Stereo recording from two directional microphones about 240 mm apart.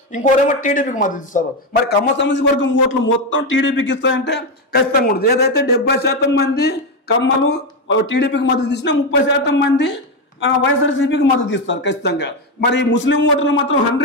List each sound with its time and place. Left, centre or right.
0.1 s speech: left
1.9 s speech: left